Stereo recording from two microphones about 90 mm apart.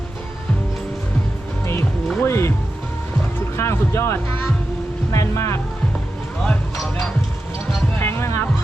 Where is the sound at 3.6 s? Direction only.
30° left (ahead or behind).